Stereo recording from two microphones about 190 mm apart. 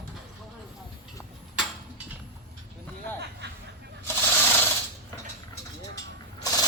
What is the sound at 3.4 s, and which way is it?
Snicker, 60° right (ahead or behind).